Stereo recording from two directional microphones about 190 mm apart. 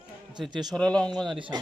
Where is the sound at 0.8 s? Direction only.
5° left (ahead or behind).